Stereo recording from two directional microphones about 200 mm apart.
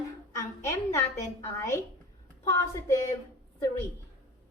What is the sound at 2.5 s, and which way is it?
Speech, 15° left (ahead or behind).